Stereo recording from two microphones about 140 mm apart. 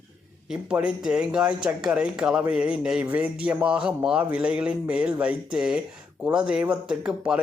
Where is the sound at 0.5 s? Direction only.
10° right (ahead or behind).